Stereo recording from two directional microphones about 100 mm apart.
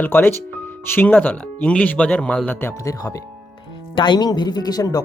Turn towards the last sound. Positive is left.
turn(degrees=40)  # may be behind; listen again after turning